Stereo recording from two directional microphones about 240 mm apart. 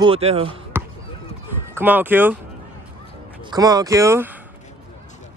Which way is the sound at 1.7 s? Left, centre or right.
Centre.